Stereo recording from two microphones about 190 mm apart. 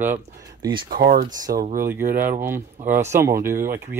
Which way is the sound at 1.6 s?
50° right (ahead or behind).